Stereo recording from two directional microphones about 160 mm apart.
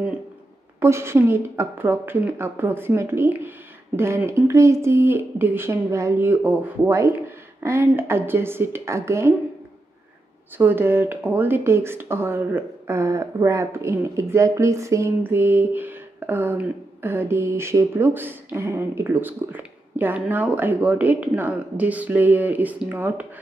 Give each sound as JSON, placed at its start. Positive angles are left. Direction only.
{"t": 0.7, "sound": "speech", "side_deg": -15}
{"t": 10.6, "sound": "speech", "side_deg": -15}